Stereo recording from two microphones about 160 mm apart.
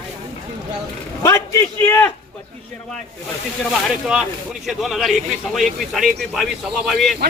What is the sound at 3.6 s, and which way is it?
Speech, 5° right (ahead or behind).